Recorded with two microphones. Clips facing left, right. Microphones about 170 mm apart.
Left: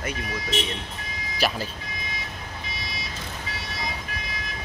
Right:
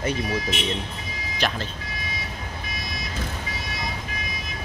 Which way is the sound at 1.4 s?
5° left (ahead or behind).